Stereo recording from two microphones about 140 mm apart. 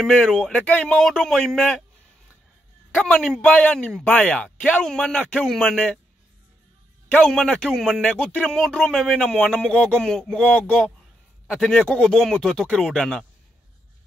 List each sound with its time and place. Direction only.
0.0 s a man's voice: centre (ahead or behind)
2.9 s speech: 5° left (ahead or behind)
7.1 s a man's voice: 5° left (ahead or behind)
11.4 s a man's voice: 5° right (ahead or behind)
11.7 s a man's voice: 5° left (ahead or behind)